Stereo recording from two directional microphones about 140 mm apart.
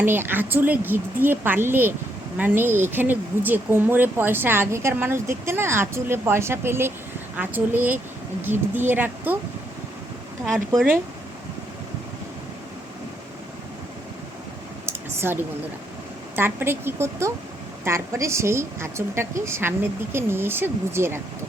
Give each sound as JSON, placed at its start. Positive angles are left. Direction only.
{"t": 0.0, "sound": "speech", "side_deg": -15}
{"t": 14.8, "sound": "a sound", "side_deg": -15}
{"t": 16.3, "sound": "a woman's voice", "side_deg": -15}